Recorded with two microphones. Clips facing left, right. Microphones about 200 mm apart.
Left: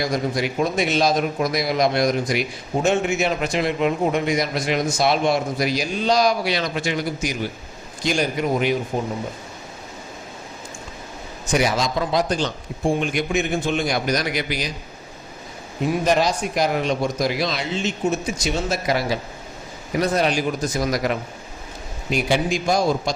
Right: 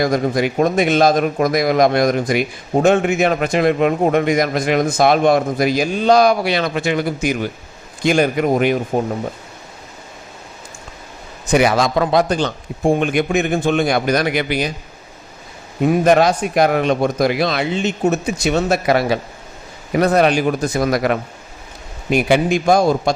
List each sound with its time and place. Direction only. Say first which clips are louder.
0.0 s a man's voice: right 6 dB; 50° right (ahead or behind)
11.5 s speech: right 6 dB; 60° right (ahead or behind)
15.9 s speech: right 6 dB; 55° right (ahead or behind)